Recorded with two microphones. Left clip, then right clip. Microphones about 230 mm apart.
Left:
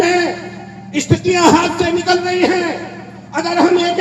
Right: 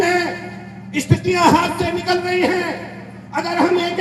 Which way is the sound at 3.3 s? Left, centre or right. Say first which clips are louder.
Left 4 dB; right.